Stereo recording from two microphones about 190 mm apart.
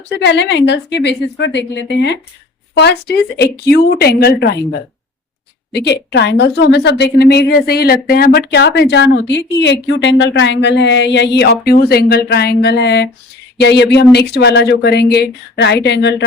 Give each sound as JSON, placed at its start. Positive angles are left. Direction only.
{"t": 0.2, "sound": "a woman's voice", "side_deg": 70}
{"t": 5.7, "sound": "a woman's voice", "side_deg": 60}